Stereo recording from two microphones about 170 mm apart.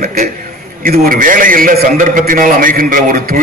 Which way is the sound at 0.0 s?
45° right (ahead or behind).